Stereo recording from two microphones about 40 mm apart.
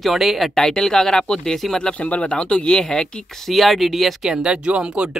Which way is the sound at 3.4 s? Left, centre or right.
Centre.